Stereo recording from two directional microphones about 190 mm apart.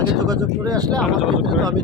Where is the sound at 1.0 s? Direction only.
Centre (ahead or behind).